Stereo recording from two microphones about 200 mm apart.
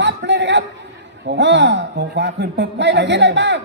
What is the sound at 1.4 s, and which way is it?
A man's voice, 60° right (ahead or behind).